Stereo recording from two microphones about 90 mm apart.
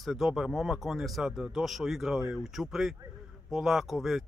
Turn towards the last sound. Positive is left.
turn(degrees=0)  # may be behind; listen again after turning